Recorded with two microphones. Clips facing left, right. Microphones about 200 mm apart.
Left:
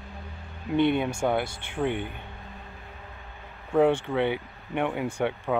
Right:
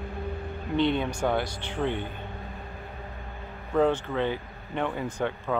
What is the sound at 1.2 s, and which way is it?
Speech, 10° left (ahead or behind).